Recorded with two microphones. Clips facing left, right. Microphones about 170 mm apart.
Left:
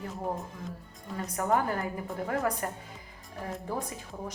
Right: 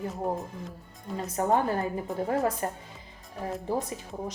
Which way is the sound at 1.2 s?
25° right (ahead or behind).